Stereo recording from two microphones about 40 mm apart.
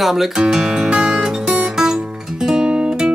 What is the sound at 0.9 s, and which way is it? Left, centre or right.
Music, centre.